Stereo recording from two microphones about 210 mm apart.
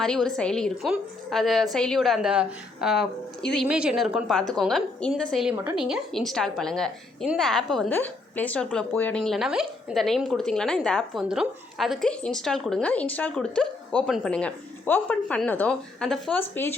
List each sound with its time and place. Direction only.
0.0 s a woman's voice: centre (ahead or behind)